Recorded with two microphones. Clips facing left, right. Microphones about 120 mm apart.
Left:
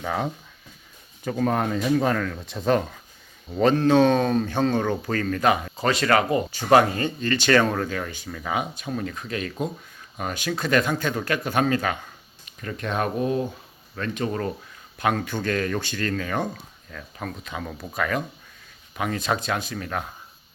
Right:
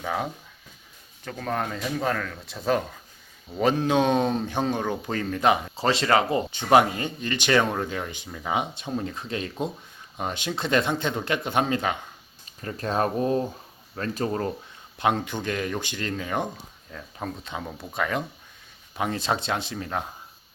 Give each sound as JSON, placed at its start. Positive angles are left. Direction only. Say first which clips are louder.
{"t": 0.0, "sound": "speech", "louder": "left 2 dB", "side_deg": 0}
{"t": 12.5, "sound": "speech", "louder": "even", "side_deg": -30}
{"t": 14.9, "sound": "speech", "louder": "even", "side_deg": -20}